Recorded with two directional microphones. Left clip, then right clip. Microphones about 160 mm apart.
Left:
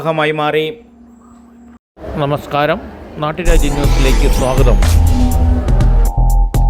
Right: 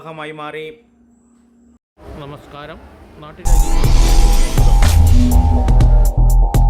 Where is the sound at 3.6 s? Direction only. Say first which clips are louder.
Left 6 dB; centre (ahead or behind).